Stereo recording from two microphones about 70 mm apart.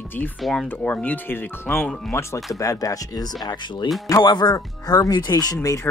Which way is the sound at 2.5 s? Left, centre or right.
Left.